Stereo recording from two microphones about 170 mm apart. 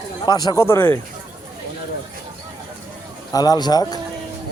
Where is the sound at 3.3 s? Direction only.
20° left (ahead or behind).